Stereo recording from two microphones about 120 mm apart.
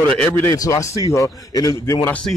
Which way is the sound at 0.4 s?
25° left (ahead or behind).